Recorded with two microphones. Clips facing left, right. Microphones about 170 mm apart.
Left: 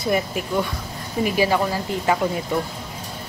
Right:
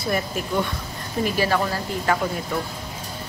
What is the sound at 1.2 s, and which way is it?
Speech, 15° left (ahead or behind).